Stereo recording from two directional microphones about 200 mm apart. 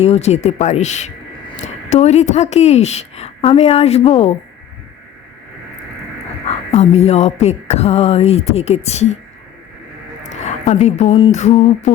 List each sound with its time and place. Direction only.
0.0 s speech: 30° left (ahead or behind)
6.4 s speech: 30° left (ahead or behind)
10.2 s speech: 35° left (ahead or behind)